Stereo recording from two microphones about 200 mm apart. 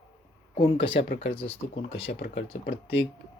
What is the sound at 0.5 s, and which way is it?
Speech, 25° left (ahead or behind).